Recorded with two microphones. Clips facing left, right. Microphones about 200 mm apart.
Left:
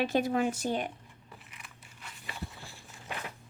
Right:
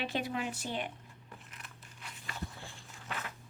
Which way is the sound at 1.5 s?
10° left (ahead or behind).